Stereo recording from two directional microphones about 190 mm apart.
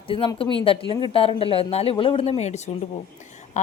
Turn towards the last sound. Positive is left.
turn(degrees=40)  # may be behind; listen again after turning